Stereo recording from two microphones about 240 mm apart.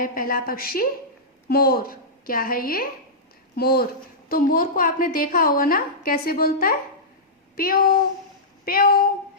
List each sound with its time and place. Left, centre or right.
0.0 s a woman's voice: left